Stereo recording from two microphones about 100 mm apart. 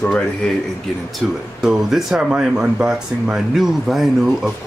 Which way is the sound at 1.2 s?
5° right (ahead or behind).